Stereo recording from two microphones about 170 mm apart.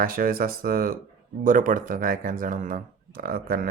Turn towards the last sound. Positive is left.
turn(degrees=-60)  # may be behind; listen again after turning